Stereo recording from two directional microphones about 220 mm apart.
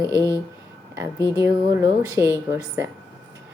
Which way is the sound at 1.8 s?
15° right (ahead or behind).